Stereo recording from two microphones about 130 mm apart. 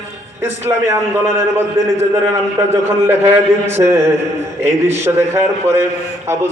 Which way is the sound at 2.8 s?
20° right (ahead or behind).